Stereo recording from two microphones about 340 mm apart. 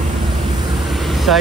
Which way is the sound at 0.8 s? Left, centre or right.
Centre.